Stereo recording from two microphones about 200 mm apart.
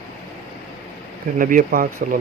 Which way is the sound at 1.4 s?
45° right (ahead or behind).